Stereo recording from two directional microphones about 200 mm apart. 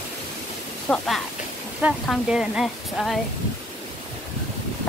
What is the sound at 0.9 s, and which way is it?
Speech, centre (ahead or behind).